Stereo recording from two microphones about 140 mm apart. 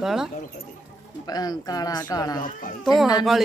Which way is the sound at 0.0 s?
5° right (ahead or behind).